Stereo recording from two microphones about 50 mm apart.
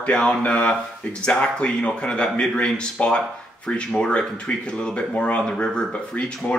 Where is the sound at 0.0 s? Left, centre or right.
Left.